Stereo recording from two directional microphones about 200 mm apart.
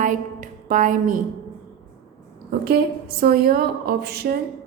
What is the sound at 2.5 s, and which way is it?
A woman's voice, 50° right (ahead or behind).